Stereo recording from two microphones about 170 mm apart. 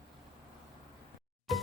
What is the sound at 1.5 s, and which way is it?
Speech, centre (ahead or behind).